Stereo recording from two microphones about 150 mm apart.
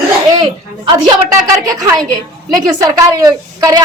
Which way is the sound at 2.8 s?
20° right (ahead or behind).